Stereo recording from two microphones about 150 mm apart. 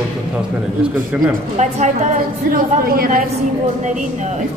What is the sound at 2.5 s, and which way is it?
Speech, 75° right (ahead or behind).